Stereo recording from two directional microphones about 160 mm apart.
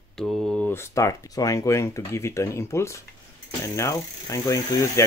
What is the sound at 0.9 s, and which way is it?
Speech, 20° left (ahead or behind).